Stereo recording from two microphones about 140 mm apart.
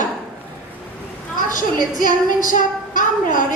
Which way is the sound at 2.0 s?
70° left (ahead or behind).